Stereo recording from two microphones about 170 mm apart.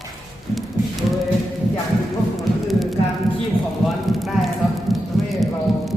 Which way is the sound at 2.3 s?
Centre (ahead or behind).